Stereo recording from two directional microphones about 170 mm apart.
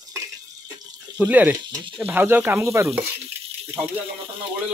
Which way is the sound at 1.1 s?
10° right (ahead or behind).